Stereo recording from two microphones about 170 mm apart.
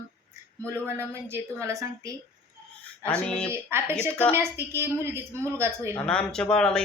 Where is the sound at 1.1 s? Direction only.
15° right (ahead or behind).